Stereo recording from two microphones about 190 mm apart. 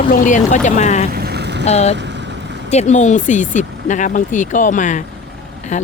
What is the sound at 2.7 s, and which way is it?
Speech, 35° left (ahead or behind).